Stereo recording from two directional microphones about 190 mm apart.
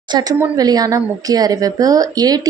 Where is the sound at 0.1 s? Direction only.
20° right (ahead or behind).